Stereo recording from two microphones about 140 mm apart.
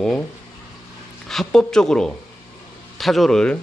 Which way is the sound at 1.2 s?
5° left (ahead or behind).